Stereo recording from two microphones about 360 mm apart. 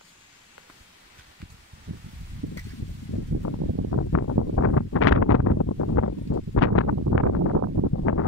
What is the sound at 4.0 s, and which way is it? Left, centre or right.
Wind noise, left.